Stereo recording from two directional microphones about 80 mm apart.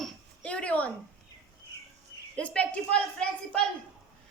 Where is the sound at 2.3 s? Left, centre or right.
Centre.